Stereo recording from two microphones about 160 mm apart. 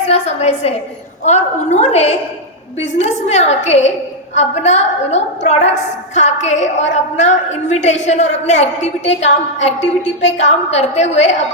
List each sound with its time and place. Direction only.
0.1 s a woman's voice: 45° left (ahead or behind)